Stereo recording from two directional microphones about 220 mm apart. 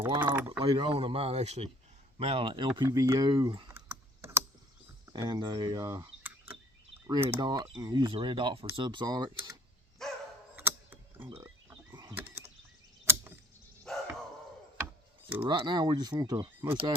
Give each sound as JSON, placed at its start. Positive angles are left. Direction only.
{"t": 0.3, "sound": "speech", "side_deg": -10}
{"t": 0.6, "sound": "speech", "side_deg": -25}
{"t": 3.8, "sound": "computer keyboard", "side_deg": -10}
{"t": 5.1, "sound": "speech", "side_deg": -20}
{"t": 7.1, "sound": "speech", "side_deg": -25}
{"t": 10.0, "sound": "dog", "side_deg": 0}
{"t": 10.5, "sound": "mechanisms", "side_deg": -10}
{"t": 11.9, "sound": "a sound", "side_deg": -15}
{"t": 13.9, "sound": "a sound", "side_deg": 0}
{"t": 15.4, "sound": "speech", "side_deg": -20}